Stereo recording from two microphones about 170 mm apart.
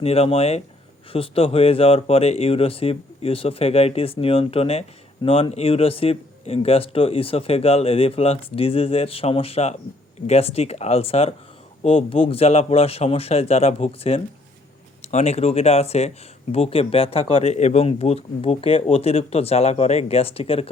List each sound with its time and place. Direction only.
0.0 s speech: 35° left (ahead or behind)